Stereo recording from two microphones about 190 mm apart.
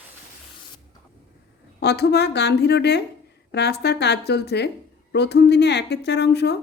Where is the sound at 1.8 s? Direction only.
60° left (ahead or behind).